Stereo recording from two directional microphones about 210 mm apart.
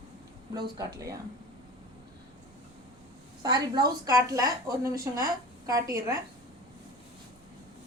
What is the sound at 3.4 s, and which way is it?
A woman's voice, 20° right (ahead or behind).